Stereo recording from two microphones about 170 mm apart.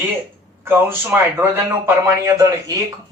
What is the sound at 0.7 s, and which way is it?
Speech, 10° right (ahead or behind).